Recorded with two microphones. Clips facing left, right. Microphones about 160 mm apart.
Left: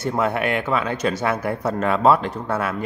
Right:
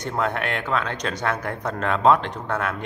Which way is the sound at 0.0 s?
10° left (ahead or behind).